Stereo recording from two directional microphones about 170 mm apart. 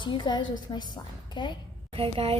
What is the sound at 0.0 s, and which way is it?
A woman's voice, 30° left (ahead or behind).